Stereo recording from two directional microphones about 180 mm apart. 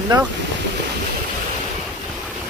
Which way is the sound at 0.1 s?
25° right (ahead or behind).